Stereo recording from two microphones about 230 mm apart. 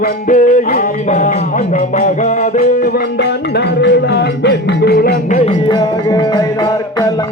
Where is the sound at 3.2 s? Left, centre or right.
Left.